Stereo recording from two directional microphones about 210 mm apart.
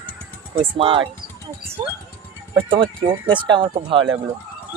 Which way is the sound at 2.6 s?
25° right (ahead or behind).